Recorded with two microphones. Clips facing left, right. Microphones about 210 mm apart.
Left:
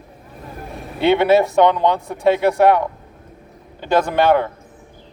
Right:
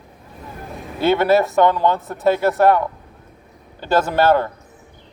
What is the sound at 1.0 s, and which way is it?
Speech, 20° left (ahead or behind).